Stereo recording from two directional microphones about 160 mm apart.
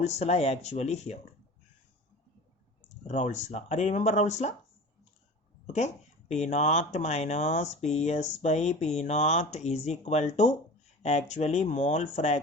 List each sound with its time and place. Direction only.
0.0 s speech: 45° left (ahead or behind)
3.1 s speech: 45° left (ahead or behind)
5.7 s speech: 45° left (ahead or behind)